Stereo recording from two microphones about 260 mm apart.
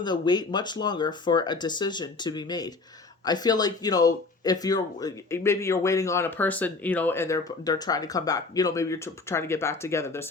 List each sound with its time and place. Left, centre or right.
0.0 s speech: centre